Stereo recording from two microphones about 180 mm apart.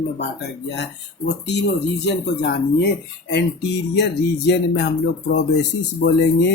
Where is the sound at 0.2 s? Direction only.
70° left (ahead or behind).